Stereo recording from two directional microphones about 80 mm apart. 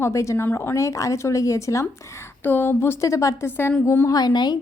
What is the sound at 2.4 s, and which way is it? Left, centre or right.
A woman's voice, left.